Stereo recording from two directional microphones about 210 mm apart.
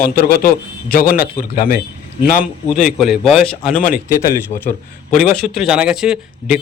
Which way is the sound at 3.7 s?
40° left (ahead or behind).